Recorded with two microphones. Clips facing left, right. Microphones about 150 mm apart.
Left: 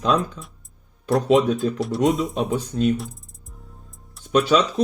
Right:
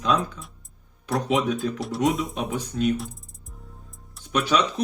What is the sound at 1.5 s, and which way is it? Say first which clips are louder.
Speech: left 4 dB; centre (ahead or behind).